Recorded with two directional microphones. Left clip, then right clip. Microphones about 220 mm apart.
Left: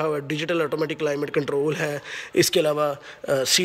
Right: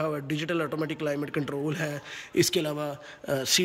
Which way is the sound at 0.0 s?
10° right (ahead or behind).